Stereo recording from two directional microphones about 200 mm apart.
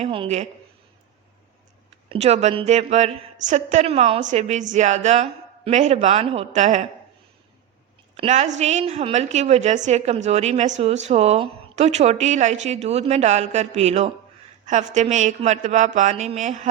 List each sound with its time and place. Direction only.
0.0 s a woman's voice: 30° right (ahead or behind)
2.0 s a woman's voice: 35° right (ahead or behind)
8.1 s a woman's voice: 30° right (ahead or behind)